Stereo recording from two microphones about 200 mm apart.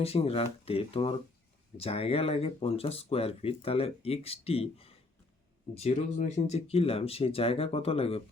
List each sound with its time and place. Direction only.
0.0 s speech: 30° left (ahead or behind)